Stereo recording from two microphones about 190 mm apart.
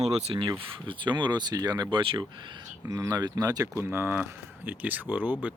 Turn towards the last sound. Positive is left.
turn(degrees=-10)  # may be behind; listen again after turning